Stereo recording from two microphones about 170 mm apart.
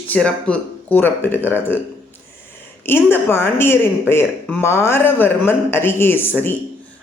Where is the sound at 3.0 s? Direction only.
15° left (ahead or behind).